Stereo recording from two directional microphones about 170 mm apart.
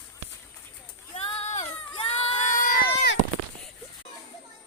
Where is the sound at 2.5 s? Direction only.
50° left (ahead or behind).